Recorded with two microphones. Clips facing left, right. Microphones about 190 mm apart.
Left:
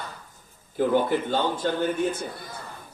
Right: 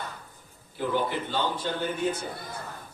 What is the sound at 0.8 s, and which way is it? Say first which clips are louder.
A man's voice: left 6 dB; 45° left (ahead or behind).